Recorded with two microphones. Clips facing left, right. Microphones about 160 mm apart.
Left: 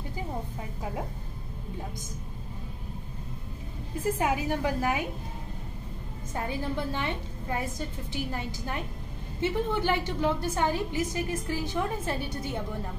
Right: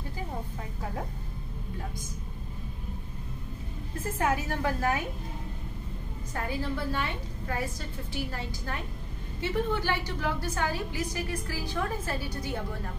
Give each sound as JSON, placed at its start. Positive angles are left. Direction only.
{"t": 4.0, "sound": "a woman's voice", "side_deg": 15}
{"t": 6.3, "sound": "a woman's voice", "side_deg": 20}